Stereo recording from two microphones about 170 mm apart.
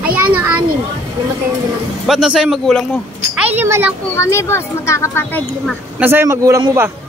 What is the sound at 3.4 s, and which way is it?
Speech, 10° right (ahead or behind).